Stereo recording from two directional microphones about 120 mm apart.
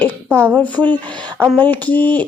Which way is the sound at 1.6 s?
15° left (ahead or behind).